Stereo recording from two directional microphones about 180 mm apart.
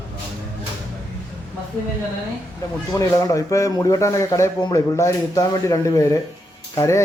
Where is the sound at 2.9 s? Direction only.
20° left (ahead or behind).